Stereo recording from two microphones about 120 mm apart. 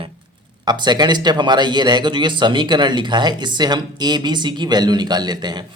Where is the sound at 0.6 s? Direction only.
35° right (ahead or behind).